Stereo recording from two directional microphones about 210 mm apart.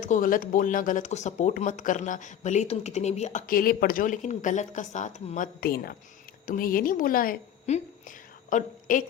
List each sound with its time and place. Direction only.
0.0 s a woman's voice: 40° left (ahead or behind)